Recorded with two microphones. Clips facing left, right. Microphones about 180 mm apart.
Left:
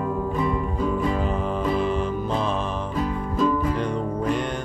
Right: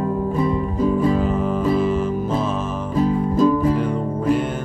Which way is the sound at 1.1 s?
5° right (ahead or behind).